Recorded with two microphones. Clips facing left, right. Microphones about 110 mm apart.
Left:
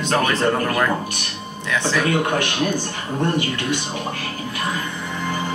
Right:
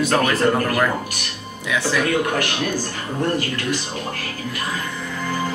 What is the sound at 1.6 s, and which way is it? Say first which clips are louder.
Speech: even; 10° right (ahead or behind).